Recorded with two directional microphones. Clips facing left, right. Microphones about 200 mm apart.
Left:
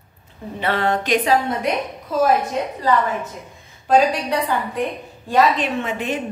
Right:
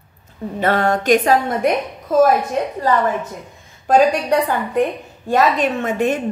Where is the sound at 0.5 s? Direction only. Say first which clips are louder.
Right 3 dB; 45° right (ahead or behind).